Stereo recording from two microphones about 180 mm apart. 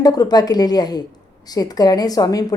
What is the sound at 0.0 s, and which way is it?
Speech, 20° left (ahead or behind).